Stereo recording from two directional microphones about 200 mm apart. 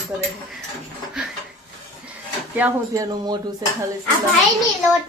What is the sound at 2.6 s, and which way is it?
Speech, 15° right (ahead or behind).